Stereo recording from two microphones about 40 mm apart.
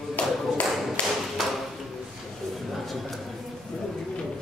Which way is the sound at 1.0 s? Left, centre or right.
Left.